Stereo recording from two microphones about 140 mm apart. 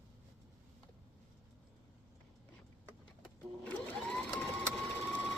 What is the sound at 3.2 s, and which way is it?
Sewing machine, 5° left (ahead or behind).